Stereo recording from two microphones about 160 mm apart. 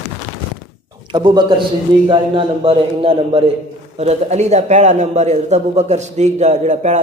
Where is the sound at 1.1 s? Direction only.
30° right (ahead or behind).